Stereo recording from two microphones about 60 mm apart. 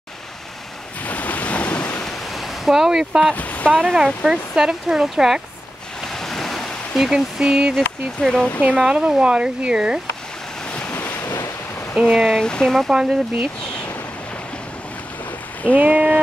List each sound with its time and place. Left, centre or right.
1.0 s waves: left
2.0 s waves: centre
3.3 s speech: left
3.9 s speech: centre
6.1 s a sound: centre
7.1 s speech: centre
8.2 s speech: centre
8.6 s speech: centre
10.9 s waves: left
11.9 s speech: centre
12.4 s speech: centre
12.9 s speech: centre
15.6 s speech: right